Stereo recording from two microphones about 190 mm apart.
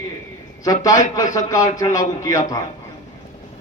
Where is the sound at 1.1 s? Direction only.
20° left (ahead or behind).